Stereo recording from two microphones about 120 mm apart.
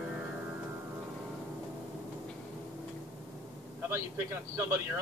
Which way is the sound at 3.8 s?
20° right (ahead or behind).